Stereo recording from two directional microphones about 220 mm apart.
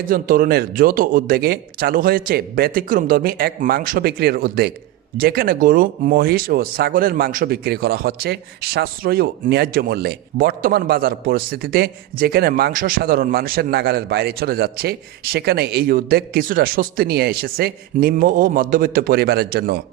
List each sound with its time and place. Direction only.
0.0 s a man's voice: 40° right (ahead or behind)